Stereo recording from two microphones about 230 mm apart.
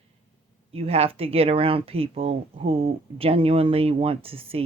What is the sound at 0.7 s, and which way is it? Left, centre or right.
Speech, right.